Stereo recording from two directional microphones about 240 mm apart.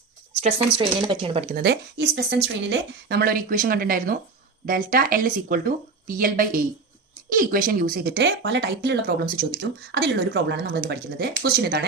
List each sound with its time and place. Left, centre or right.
0.4 s speech: right
1.5 s speech: right